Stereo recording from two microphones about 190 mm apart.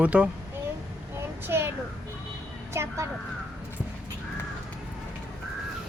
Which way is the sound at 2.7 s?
15° right (ahead or behind).